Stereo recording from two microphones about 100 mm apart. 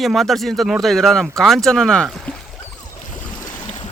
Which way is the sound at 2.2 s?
10° left (ahead or behind).